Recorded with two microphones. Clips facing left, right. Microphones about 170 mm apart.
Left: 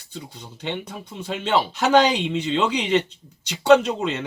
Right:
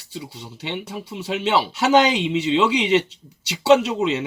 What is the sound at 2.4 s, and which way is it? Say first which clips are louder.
Speech: right 4 dB; 5° right (ahead or behind).